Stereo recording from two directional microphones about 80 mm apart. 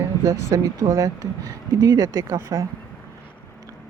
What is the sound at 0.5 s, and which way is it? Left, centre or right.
Speech, right.